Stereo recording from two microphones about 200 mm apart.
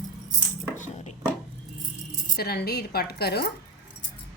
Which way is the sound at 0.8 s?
35° left (ahead or behind).